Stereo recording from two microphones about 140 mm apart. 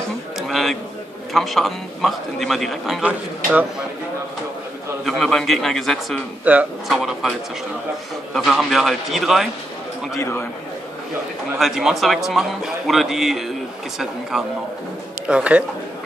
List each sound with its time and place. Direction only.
0.4 s music: centre (ahead or behind)
1.3 s a man's voice: centre (ahead or behind)
5.0 s a man's voice: centre (ahead or behind)
6.4 s a man's voice: 10° right (ahead or behind)
10.1 s a man's voice: 20° left (ahead or behind)
11.5 s a man's voice: 5° right (ahead or behind)